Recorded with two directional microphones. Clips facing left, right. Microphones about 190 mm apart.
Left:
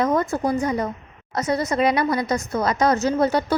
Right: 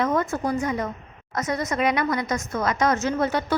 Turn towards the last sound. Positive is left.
turn(degrees=35)  # may be behind; listen again after turning